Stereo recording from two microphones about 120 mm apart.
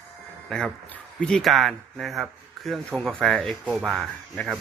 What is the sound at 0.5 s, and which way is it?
Speech, 5° left (ahead or behind).